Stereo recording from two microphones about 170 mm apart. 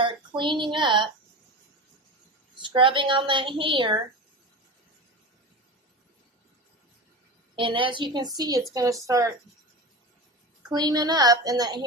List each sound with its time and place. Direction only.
0.0 s a woman's voice: 30° right (ahead or behind)
2.6 s a woman's voice: 30° right (ahead or behind)
7.5 s a woman's voice: 30° right (ahead or behind)
10.7 s a woman's voice: 25° right (ahead or behind)